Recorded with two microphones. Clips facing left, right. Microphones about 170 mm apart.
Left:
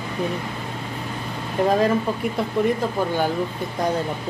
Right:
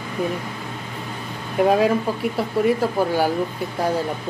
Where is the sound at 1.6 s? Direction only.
10° right (ahead or behind).